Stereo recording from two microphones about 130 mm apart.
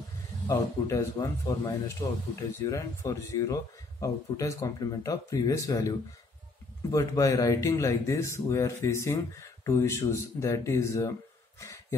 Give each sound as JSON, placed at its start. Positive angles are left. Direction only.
{"t": 0.5, "sound": "speech", "side_deg": 25}